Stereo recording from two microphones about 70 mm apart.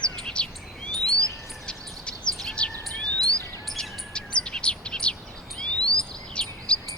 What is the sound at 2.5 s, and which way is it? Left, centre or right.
Bird, centre.